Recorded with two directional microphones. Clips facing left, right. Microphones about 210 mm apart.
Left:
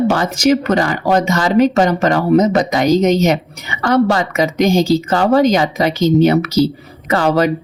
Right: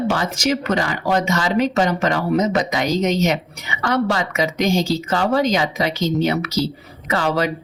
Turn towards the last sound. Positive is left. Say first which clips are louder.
# left 6 dB
turn(degrees=45)  # may be behind; listen again after turning